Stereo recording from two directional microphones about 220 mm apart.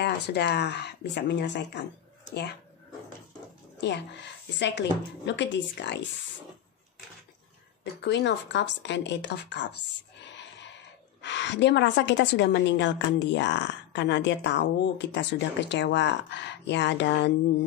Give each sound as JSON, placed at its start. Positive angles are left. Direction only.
{"t": 0.0, "sound": "a woman's voice", "side_deg": 50}
{"t": 3.8, "sound": "a woman's voice", "side_deg": 50}
{"t": 8.0, "sound": "a woman's voice", "side_deg": 55}
{"t": 11.1, "sound": "a woman's voice", "side_deg": 55}